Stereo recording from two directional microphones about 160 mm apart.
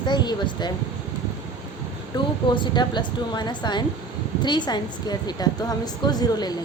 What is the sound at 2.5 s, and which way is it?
A woman's voice, 30° left (ahead or behind).